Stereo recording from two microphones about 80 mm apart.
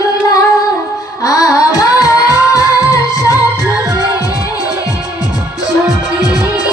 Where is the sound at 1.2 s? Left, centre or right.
Left.